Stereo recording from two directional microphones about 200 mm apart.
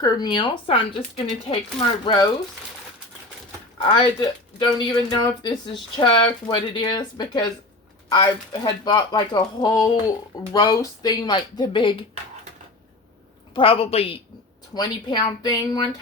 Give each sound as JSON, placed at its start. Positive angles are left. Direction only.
{"t": 0.0, "sound": "speech", "side_deg": 20}
{"t": 3.8, "sound": "speech", "side_deg": 25}
{"t": 13.5, "sound": "speech", "side_deg": 25}